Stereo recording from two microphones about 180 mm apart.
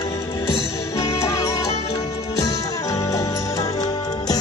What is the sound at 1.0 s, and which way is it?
Music, 20° left (ahead or behind).